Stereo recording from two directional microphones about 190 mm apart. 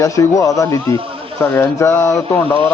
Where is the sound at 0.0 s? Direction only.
15° left (ahead or behind).